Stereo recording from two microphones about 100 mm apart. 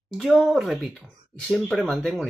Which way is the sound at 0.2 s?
Centre (ahead or behind).